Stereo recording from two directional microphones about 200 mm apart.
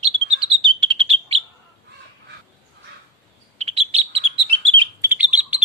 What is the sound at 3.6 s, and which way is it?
Bird, 30° right (ahead or behind).